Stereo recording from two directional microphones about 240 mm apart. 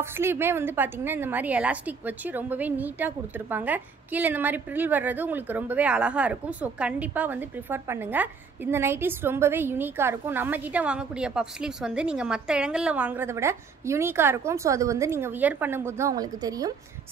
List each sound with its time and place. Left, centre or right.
0.0 s a woman's voice: centre